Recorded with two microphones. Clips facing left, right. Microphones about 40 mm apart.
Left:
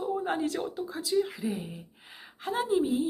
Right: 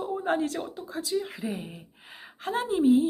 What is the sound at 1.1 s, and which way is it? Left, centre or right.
Speech, centre.